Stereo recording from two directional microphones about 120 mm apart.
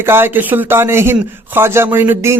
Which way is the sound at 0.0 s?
20° right (ahead or behind).